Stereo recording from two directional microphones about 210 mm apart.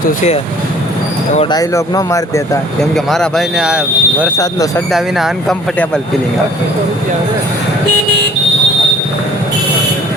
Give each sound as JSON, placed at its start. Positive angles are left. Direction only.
{"t": 1.5, "sound": "speech", "side_deg": 15}
{"t": 2.9, "sound": "speech", "side_deg": 0}